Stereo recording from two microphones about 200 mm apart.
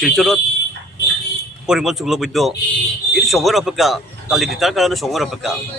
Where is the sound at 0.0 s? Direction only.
Centre (ahead or behind).